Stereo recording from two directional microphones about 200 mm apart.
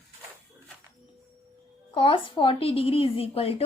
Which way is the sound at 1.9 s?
25° left (ahead or behind).